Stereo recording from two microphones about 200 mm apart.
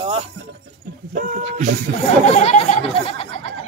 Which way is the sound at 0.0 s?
30° right (ahead or behind).